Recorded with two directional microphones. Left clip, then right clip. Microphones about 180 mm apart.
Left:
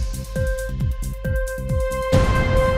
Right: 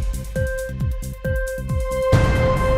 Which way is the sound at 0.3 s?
Centre (ahead or behind).